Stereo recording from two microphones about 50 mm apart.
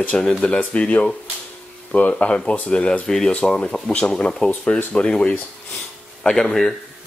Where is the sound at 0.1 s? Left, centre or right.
Centre.